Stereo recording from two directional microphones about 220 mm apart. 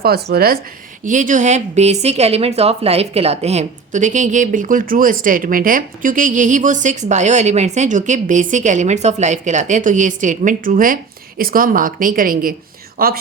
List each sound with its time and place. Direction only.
0.0 s speech: 45° right (ahead or behind)